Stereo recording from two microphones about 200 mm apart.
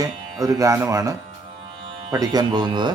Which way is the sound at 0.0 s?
15° right (ahead or behind).